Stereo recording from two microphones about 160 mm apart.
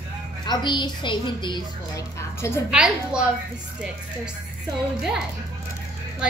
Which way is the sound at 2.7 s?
5° right (ahead or behind).